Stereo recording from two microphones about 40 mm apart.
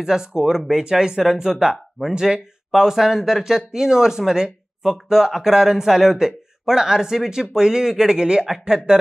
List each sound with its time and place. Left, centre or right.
0.0 s a man's voice: centre